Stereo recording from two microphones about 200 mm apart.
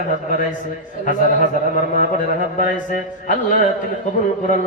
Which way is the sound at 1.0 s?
40° left (ahead or behind).